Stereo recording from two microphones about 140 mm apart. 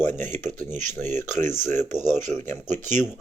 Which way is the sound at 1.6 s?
15° left (ahead or behind).